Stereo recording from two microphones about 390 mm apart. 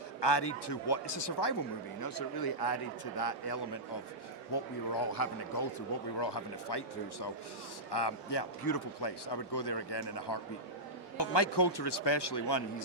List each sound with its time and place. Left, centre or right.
0.2 s speech: left
2.0 s speech: left
6.1 s a man's voice: left